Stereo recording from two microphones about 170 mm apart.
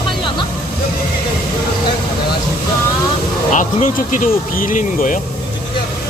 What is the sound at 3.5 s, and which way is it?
Speech, 50° left (ahead or behind).